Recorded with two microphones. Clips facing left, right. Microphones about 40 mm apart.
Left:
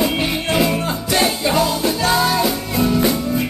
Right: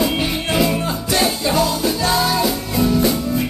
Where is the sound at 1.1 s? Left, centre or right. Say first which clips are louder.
Left 1 dB; centre.